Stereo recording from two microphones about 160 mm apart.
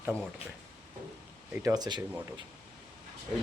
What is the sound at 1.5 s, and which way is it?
Speech, 20° right (ahead or behind).